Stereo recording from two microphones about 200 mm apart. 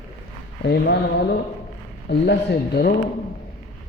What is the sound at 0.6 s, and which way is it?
Speech, 55° left (ahead or behind).